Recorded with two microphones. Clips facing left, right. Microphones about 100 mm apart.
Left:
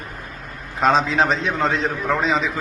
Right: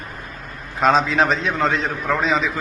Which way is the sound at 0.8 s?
25° left (ahead or behind).